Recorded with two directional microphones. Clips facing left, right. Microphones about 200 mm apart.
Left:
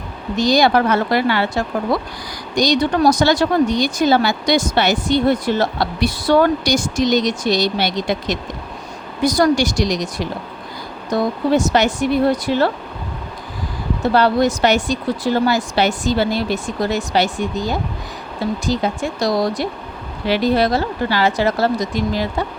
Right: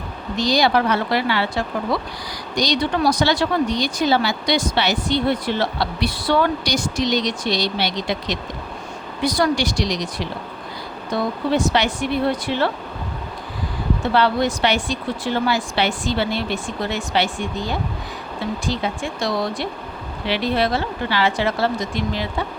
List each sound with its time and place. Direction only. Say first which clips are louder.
0.3 s speech: left 4 dB; 50° left (ahead or behind)
14.0 s speech: left 4 dB; 40° left (ahead or behind)